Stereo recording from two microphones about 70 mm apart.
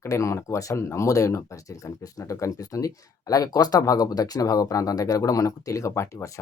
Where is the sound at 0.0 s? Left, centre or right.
Left.